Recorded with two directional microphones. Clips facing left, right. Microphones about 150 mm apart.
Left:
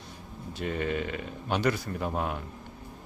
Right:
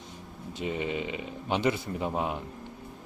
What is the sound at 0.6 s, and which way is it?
Speech, 15° right (ahead or behind).